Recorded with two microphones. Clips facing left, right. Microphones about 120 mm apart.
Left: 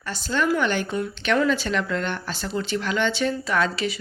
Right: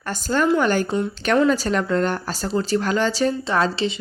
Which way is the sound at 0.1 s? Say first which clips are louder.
Right 4 dB; 45° right (ahead or behind).